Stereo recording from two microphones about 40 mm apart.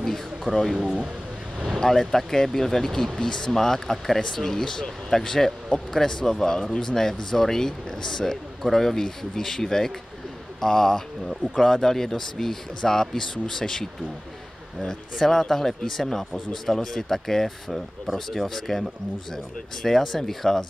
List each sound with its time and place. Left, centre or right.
0.5 s speech: right
1.8 s speech: centre
15.1 s speech: centre